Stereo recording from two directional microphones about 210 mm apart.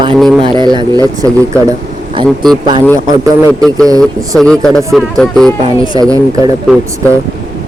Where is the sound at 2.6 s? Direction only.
20° right (ahead or behind).